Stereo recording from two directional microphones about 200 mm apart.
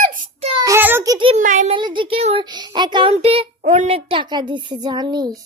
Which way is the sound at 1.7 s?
25° right (ahead or behind).